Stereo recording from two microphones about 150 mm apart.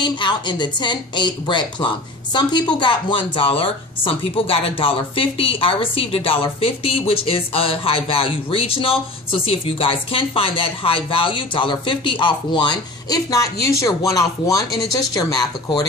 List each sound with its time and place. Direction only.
0.0 s speech: 30° left (ahead or behind)